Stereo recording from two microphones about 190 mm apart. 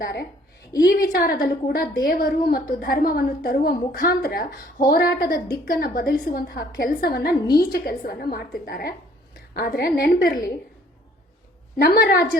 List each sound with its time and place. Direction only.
0.0 s a woman's voice: 60° left (ahead or behind)
11.8 s a woman's voice: 55° left (ahead or behind)